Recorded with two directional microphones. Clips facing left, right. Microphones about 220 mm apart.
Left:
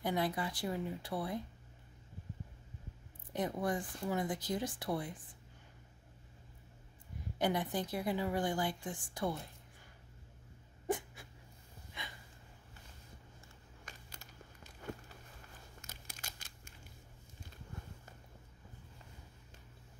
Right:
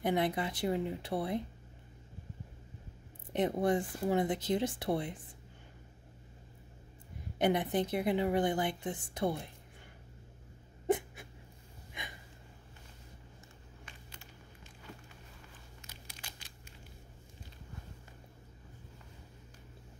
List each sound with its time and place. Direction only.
0.0 s a woman's voice: 20° right (ahead or behind)
3.3 s a woman's voice: 25° right (ahead or behind)
7.3 s a woman's voice: 20° right (ahead or behind)
10.9 s a sound: 20° right (ahead or behind)
13.8 s a sound: 40° left (ahead or behind)
15.8 s crumpling: 45° left (ahead or behind)